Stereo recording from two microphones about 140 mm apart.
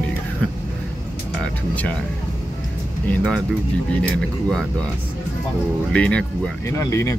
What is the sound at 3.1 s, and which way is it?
Speech, 5° left (ahead or behind).